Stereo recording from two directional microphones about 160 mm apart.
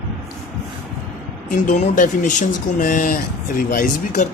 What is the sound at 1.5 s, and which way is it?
Speech, 50° left (ahead or behind).